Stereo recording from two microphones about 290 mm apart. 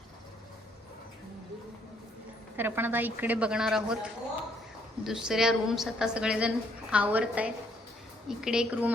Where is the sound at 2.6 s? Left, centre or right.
Centre.